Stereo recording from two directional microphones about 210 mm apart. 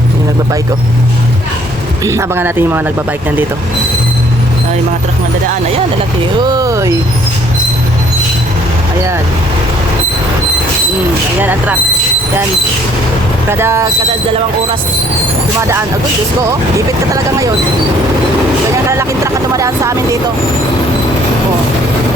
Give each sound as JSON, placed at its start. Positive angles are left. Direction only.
{"t": 2.0, "sound": "speech", "side_deg": -15}
{"t": 6.4, "sound": "speech", "side_deg": -20}
{"t": 11.3, "sound": "speech", "side_deg": -10}
{"t": 13.5, "sound": "speech", "side_deg": -10}
{"t": 18.9, "sound": "speech", "side_deg": -15}